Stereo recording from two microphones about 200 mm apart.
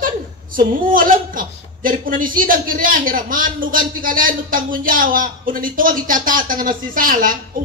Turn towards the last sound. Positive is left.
turn(degrees=-45)  # may be behind; listen again after turning